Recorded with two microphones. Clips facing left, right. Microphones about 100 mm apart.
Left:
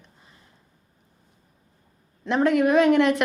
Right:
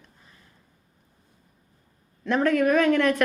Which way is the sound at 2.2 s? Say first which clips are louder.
Left 1 dB; 20° left (ahead or behind).